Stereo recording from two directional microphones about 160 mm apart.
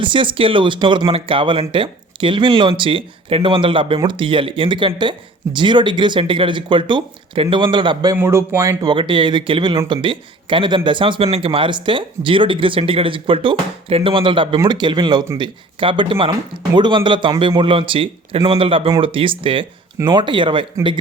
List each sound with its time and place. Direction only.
0.0 s speech: 30° right (ahead or behind)
8.1 s speech: 15° right (ahead or behind); by 20.7 s 30° right (ahead or behind)